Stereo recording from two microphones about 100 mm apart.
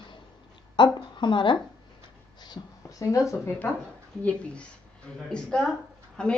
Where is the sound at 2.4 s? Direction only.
40° left (ahead or behind).